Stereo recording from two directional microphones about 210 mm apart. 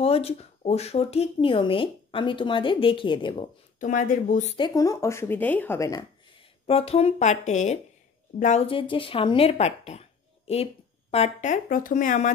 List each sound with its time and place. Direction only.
0.0 s speech: 30° left (ahead or behind)
3.8 s speech: 40° left (ahead or behind)
4.6 s speech: 20° left (ahead or behind)
6.7 s speech: 30° left (ahead or behind)